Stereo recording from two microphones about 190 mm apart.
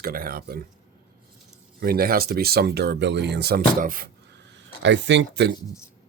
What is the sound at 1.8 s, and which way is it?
Speech, 50° right (ahead or behind).